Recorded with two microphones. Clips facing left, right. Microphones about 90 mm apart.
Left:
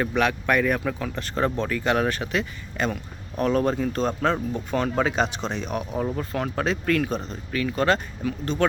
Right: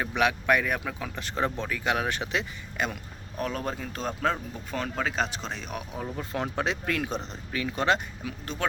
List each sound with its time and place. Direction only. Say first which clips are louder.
0.0 s speech: left 3 dB; 15° right (ahead or behind)
6.3 s speech: even; 20° right (ahead or behind)
8.5 s speech: left 10 dB; 5° right (ahead or behind)